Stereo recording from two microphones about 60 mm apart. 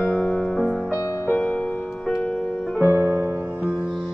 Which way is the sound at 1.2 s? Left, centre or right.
Left.